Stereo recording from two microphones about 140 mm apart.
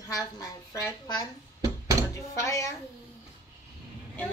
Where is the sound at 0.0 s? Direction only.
25° left (ahead or behind).